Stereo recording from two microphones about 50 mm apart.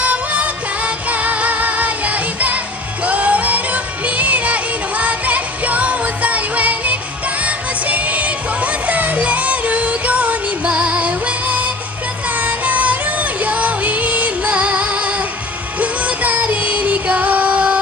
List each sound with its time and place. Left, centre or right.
0.0 s music: right